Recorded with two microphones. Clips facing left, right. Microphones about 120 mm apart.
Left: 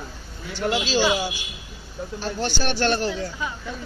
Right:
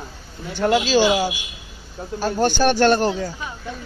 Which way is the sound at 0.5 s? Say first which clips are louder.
Right 6 dB; 50° right (ahead or behind).